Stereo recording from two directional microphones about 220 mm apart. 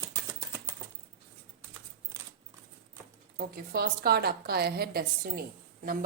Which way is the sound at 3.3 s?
45° right (ahead or behind).